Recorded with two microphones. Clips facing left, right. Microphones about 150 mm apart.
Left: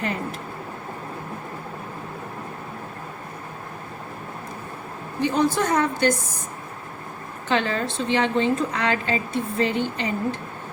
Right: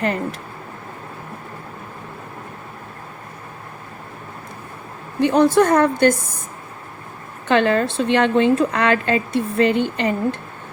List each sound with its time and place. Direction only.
0.0 s a woman's voice: 65° right (ahead or behind)
5.2 s a woman's voice: 65° right (ahead or behind)
7.4 s a woman's voice: 60° right (ahead or behind)